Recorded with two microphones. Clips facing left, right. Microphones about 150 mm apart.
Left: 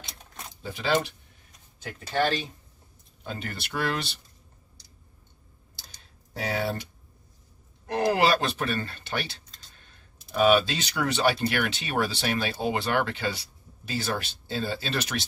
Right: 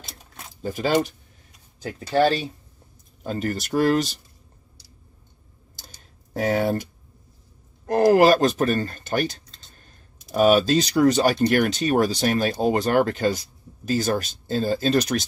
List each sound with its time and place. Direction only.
0.0 s keys jangling: centre (ahead or behind)
0.6 s speech: 45° right (ahead or behind)
6.3 s speech: 45° right (ahead or behind)